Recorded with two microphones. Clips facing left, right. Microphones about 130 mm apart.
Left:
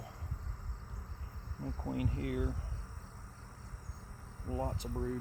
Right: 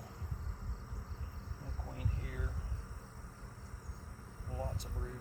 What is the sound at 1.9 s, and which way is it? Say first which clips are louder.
Speech: left 10 dB; 90° left.